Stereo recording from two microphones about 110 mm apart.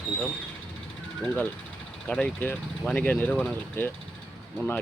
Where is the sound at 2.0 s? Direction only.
10° left (ahead or behind).